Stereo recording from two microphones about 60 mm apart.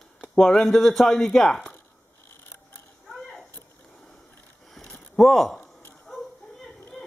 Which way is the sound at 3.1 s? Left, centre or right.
Centre.